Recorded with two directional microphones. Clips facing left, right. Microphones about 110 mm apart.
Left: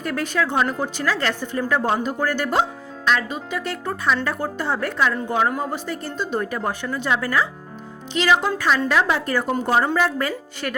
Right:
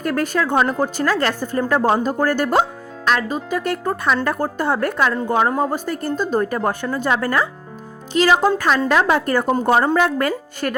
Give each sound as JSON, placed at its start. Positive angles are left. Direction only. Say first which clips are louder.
{"t": 0.0, "sound": "speech", "louder": "right 3 dB", "side_deg": -45}